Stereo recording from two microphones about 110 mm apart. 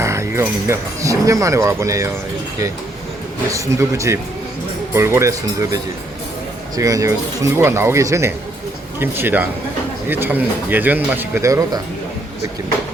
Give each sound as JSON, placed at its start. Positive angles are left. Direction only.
{"t": 0.0, "sound": "speech", "side_deg": -25}
{"t": 3.5, "sound": "speech", "side_deg": -30}
{"t": 11.4, "sound": "speech", "side_deg": -30}